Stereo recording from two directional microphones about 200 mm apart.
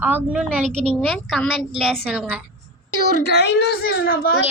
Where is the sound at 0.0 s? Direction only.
10° right (ahead or behind).